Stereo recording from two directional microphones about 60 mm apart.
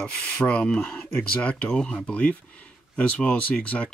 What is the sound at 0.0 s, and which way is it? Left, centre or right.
Speech, centre.